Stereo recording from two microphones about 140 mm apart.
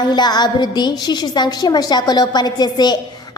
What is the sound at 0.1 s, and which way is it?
A woman's voice, 30° left (ahead or behind).